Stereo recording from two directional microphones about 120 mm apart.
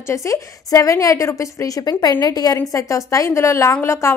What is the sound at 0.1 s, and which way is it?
A woman's voice, 25° left (ahead or behind).